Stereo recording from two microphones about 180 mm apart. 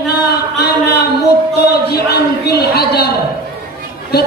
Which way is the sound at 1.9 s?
60° left (ahead or behind).